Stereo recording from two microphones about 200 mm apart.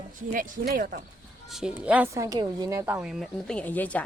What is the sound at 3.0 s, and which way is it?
Speech, 5° right (ahead or behind).